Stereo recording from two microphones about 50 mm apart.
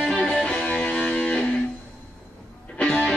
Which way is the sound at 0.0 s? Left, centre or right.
Centre.